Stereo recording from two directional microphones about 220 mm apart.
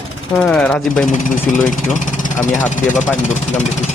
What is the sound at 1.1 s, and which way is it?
Speech, 35° left (ahead or behind).